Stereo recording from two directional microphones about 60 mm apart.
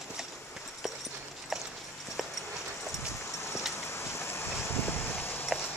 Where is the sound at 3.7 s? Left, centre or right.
Left.